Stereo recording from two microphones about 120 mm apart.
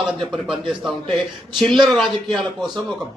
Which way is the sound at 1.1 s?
Centre (ahead or behind).